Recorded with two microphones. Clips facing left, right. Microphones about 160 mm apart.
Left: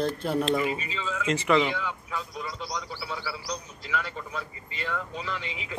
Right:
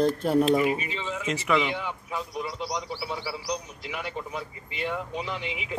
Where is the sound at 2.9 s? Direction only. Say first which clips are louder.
Right 3 dB; 25° right (ahead or behind).